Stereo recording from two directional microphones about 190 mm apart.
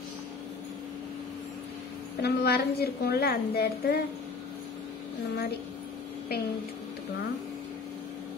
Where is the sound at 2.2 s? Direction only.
55° left (ahead or behind).